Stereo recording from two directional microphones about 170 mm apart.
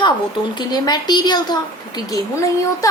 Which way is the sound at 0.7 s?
25° left (ahead or behind).